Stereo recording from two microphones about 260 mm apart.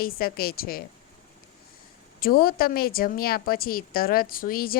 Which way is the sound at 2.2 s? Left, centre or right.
Left.